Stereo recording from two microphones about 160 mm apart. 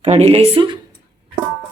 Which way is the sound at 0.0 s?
40° right (ahead or behind).